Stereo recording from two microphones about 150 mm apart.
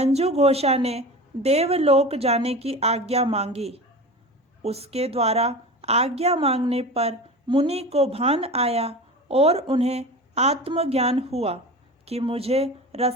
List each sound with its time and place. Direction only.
0.0 s a woman's voice: 45° right (ahead or behind)